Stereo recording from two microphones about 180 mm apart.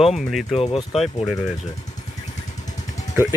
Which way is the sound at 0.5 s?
35° left (ahead or behind).